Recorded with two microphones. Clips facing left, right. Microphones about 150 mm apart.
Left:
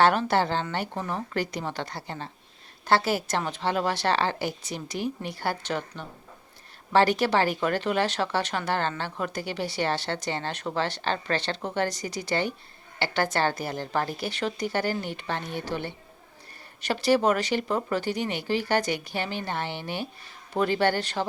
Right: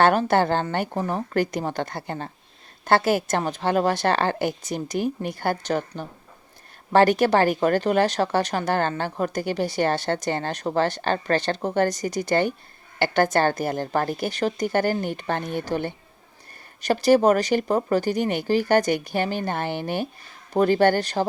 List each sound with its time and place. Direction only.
0.0 s speech: 50° right (ahead or behind)